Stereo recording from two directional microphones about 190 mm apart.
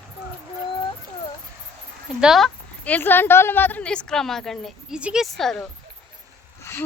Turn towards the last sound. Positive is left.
turn(degrees=15)  # may be behind; listen again after turning